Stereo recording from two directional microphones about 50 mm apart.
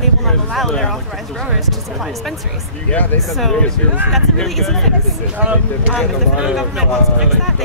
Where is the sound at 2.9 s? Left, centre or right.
Left.